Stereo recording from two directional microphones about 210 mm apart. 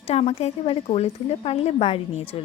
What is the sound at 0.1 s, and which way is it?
A woman's voice, 30° left (ahead or behind).